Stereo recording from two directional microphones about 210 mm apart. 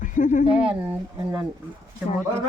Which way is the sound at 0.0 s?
40° left (ahead or behind).